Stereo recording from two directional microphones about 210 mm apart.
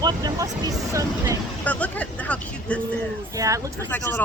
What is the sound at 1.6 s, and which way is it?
Speech, 5° left (ahead or behind).